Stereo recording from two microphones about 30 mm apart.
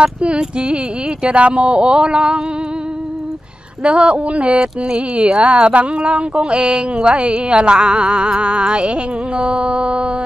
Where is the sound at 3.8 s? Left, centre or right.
Right.